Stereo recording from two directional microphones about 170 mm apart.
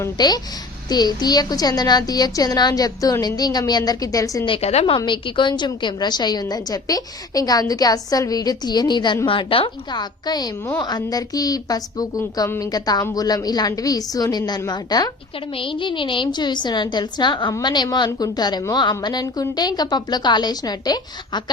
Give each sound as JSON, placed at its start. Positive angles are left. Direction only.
{"t": 0.0, "sound": "a woman's voice", "side_deg": 25}
{"t": 4.5, "sound": "a woman's voice", "side_deg": 40}
{"t": 4.9, "sound": "a woman's voice", "side_deg": 30}